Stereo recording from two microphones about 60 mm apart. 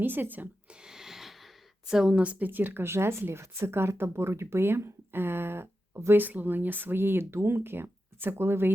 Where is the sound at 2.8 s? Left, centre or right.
Right.